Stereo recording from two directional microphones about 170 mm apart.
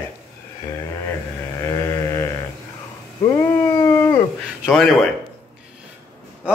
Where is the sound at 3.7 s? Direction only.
15° left (ahead or behind).